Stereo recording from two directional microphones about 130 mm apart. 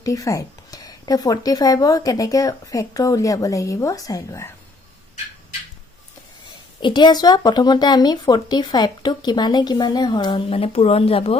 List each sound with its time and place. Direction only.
0.0 s speech: 25° left (ahead or behind)
6.8 s speech: 35° left (ahead or behind)
10.5 s speech: 50° left (ahead or behind)